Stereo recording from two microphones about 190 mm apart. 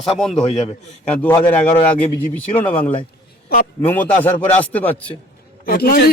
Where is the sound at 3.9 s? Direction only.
10° left (ahead or behind).